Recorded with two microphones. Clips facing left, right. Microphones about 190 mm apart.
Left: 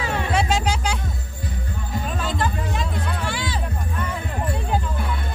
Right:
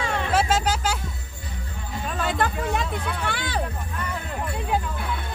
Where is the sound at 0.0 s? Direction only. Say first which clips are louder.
Even; 5° right (ahead or behind).